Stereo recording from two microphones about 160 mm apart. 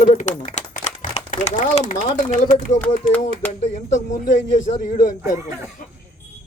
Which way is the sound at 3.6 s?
50° left (ahead or behind).